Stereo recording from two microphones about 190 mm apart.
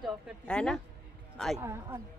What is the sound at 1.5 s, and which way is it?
Speech, 15° right (ahead or behind).